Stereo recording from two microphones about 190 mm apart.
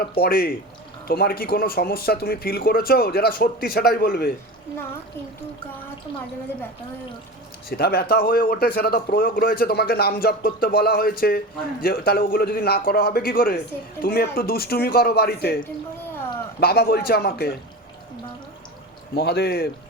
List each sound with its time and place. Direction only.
0.2 s speech: 50° left (ahead or behind)
7.7 s a man's voice: 55° left (ahead or behind)
19.1 s a man's voice: 55° left (ahead or behind)